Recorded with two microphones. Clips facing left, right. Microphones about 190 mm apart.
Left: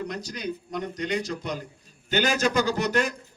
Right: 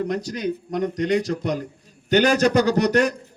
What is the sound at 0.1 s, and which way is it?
A man's voice, 65° right (ahead or behind).